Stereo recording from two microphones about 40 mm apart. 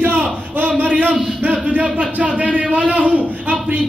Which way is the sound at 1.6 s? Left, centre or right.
Right.